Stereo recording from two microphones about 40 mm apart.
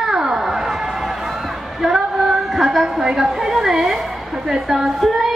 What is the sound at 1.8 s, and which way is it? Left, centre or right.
Female singing, centre.